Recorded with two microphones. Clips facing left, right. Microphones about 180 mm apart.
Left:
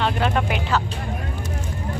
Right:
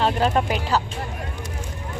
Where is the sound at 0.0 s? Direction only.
35° right (ahead or behind).